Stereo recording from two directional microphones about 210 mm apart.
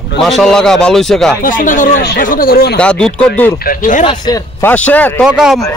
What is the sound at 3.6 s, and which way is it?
Speech, 40° left (ahead or behind).